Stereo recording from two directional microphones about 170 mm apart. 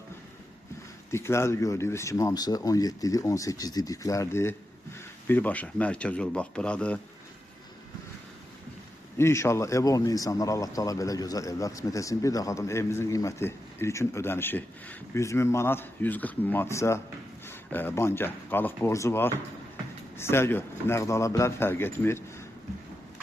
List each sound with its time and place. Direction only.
1.1 s a man's voice: 15° left (ahead or behind)
9.1 s a man's voice: 15° left (ahead or behind)